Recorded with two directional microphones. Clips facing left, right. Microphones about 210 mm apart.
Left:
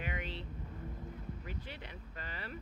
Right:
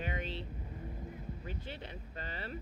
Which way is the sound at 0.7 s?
15° right (ahead or behind).